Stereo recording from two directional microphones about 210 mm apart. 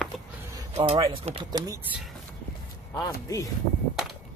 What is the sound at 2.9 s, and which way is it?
Speech, 15° left (ahead or behind).